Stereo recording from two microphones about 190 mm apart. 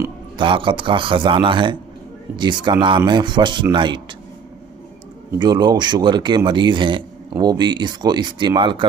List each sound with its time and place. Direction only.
0.4 s a man's voice: 25° right (ahead or behind)
5.4 s a man's voice: 20° right (ahead or behind)